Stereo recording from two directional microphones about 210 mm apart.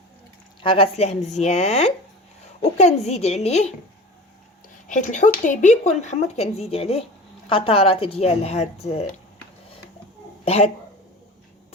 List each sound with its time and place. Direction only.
0.6 s speech: 25° left (ahead or behind)
4.9 s a woman's voice: 35° left (ahead or behind)
10.4 s speech: 30° left (ahead or behind)